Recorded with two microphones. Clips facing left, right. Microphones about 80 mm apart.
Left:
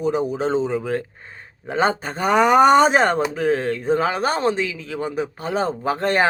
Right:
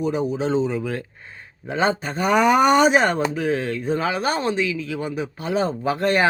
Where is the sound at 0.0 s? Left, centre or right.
Left.